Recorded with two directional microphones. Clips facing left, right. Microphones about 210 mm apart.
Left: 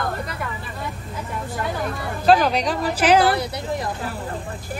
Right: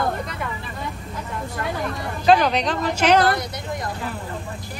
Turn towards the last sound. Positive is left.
turn(degrees=5)  # may be behind; listen again after turning